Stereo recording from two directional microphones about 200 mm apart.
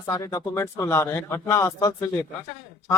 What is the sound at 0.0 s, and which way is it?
A man's voice, 15° left (ahead or behind).